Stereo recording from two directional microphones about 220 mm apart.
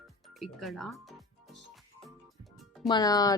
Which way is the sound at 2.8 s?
20° left (ahead or behind).